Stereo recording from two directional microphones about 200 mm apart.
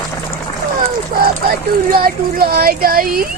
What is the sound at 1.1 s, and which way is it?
Speech, 50° right (ahead or behind).